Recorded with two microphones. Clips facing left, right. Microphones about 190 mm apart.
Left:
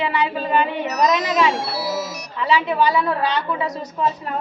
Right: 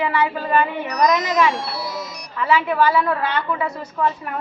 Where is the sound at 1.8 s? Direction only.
5° left (ahead or behind).